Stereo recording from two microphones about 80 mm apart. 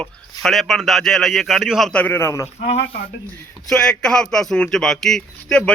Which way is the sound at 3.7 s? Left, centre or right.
Centre.